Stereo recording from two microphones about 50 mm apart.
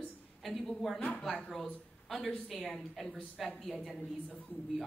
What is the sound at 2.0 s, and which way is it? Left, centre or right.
Speech, centre.